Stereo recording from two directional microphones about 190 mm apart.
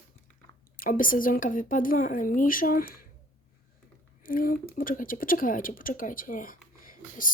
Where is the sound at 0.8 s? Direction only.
45° left (ahead or behind).